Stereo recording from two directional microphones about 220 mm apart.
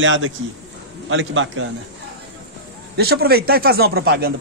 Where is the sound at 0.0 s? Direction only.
60° right (ahead or behind).